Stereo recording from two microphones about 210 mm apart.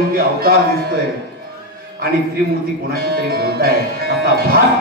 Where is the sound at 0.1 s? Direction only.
45° right (ahead or behind).